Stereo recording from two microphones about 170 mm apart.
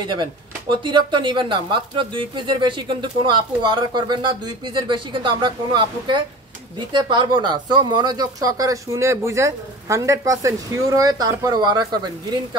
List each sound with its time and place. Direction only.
0.1 s speech: 25° right (ahead or behind)